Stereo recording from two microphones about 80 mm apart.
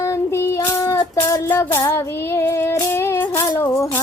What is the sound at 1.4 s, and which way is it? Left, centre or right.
Music, left.